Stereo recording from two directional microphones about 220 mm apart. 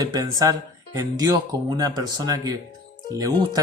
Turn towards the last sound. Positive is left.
turn(degrees=-15)  # may be behind; listen again after turning